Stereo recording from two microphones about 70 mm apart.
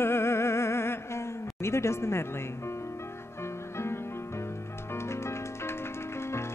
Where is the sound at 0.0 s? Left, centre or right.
Left.